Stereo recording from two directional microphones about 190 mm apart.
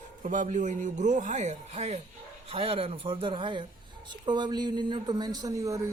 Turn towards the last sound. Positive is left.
turn(degrees=-15)  # may be behind; listen again after turning